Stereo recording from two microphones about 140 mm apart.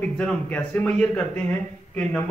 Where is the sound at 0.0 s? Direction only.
10° left (ahead or behind).